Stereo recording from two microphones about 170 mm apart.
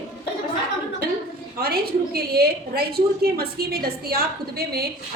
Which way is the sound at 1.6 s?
65° right (ahead or behind).